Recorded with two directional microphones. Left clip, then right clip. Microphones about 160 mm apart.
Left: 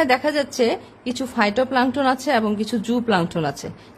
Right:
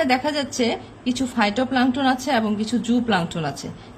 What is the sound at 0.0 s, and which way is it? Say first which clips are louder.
A woman's voice: left 2 dB; 65° left (ahead or behind).